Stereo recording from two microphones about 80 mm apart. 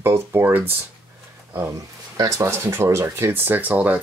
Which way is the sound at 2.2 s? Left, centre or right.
Right.